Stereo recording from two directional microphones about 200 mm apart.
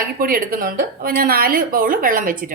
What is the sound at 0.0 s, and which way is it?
Speech, 45° right (ahead or behind).